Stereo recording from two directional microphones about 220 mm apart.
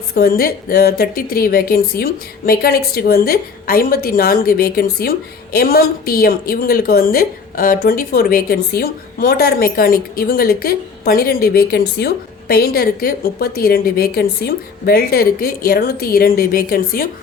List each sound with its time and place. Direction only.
0.1 s a woman's voice: 45° left (ahead or behind)